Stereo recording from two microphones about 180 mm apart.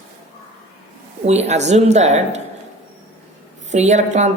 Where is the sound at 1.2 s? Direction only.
35° right (ahead or behind).